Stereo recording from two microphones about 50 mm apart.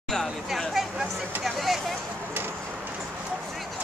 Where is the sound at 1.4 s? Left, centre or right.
Centre.